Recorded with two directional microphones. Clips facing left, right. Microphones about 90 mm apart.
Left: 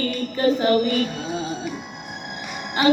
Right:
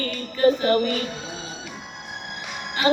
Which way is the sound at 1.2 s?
55° left (ahead or behind).